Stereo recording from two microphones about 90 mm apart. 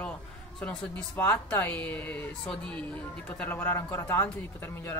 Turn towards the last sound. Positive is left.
turn(degrees=25)  # may be behind; listen again after turning